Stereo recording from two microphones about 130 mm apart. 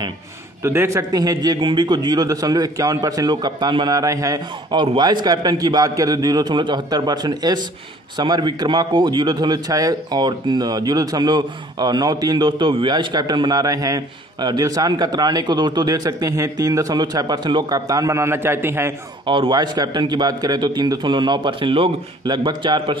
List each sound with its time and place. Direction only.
0.7 s a man's voice: 20° right (ahead or behind)
19.2 s a man's voice: 40° right (ahead or behind)